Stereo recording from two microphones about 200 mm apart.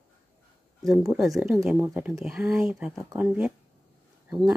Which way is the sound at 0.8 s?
15° right (ahead or behind).